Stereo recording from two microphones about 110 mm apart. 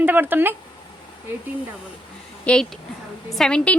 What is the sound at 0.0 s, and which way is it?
Speech, 15° right (ahead or behind).